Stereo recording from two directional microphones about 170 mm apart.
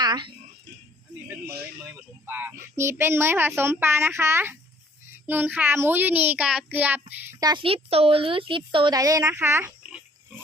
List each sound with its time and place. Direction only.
0.0 s speech: 25° right (ahead or behind)
1.9 s a child's voice: 10° right (ahead or behind)